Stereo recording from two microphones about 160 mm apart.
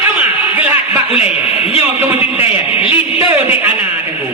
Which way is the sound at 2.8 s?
35° left (ahead or behind).